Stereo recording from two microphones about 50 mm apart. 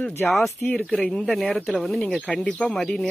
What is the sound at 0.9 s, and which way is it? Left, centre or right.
Speech, left.